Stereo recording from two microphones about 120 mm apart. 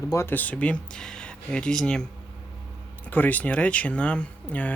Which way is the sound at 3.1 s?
15° left (ahead or behind).